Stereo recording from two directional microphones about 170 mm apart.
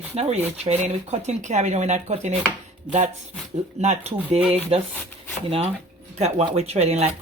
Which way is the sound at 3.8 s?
40° right (ahead or behind).